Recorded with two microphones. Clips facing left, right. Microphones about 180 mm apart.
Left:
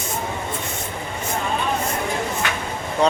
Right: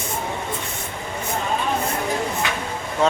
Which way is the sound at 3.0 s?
Centre (ahead or behind).